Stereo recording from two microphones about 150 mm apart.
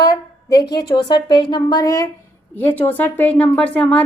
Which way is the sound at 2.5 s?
10° left (ahead or behind).